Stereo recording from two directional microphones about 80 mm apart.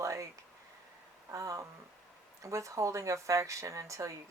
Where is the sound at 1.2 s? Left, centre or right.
Right.